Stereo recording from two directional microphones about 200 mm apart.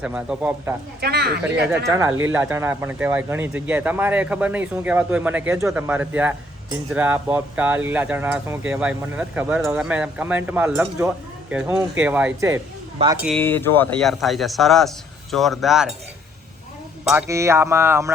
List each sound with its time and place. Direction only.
0.0 s speech: 5° right (ahead or behind)
1.0 s speech: 55° right (ahead or behind)
2.3 s speech: 10° right (ahead or behind)
13.0 s speech: 30° right (ahead or behind)
13.4 s a man's voice: 10° left (ahead or behind)
17.1 s speech: 10° right (ahead or behind)